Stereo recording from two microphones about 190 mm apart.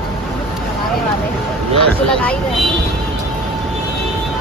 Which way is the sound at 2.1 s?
5° left (ahead or behind).